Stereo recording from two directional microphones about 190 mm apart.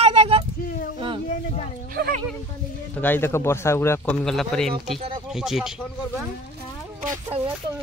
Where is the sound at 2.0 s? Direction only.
55° right (ahead or behind).